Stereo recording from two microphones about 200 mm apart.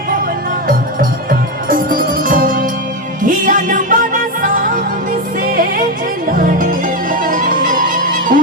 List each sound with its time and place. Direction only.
0.7 s music: 45° right (ahead or behind)